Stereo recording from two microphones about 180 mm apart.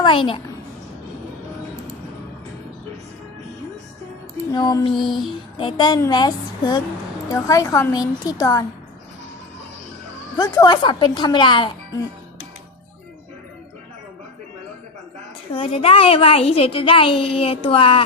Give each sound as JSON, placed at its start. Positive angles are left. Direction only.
{"t": 0.0, "sound": "a child's voice", "side_deg": 30}
{"t": 4.5, "sound": "a woman's voice", "side_deg": 20}
{"t": 4.9, "sound": "music", "side_deg": 0}
{"t": 5.5, "sound": "a woman's voice", "side_deg": 30}
{"t": 10.3, "sound": "a woman's voice", "side_deg": 20}
{"t": 15.5, "sound": "a woman's voice", "side_deg": 30}